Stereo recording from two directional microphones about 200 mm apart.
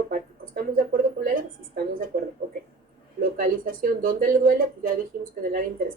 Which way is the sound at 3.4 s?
45° right (ahead or behind).